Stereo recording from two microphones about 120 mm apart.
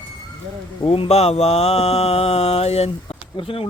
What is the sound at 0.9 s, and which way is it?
Mantra, 55° left (ahead or behind).